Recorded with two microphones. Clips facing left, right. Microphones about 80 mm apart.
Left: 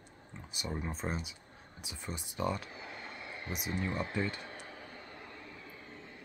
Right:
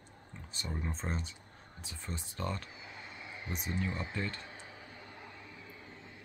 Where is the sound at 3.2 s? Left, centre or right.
Centre.